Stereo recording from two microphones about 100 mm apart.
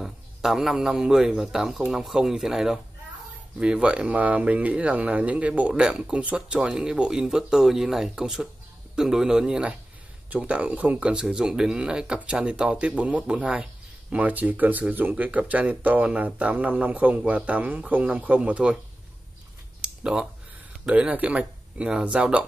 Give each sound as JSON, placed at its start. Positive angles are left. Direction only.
{"t": 0.0, "sound": "a man's voice", "side_deg": 0}
{"t": 19.8, "sound": "a sound", "side_deg": -10}
{"t": 20.8, "sound": "speech", "side_deg": -10}